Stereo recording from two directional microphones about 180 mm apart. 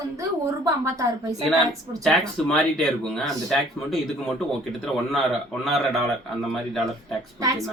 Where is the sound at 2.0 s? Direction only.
5° left (ahead or behind).